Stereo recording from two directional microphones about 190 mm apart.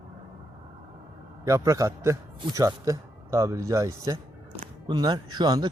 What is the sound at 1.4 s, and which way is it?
A man's voice, 15° right (ahead or behind).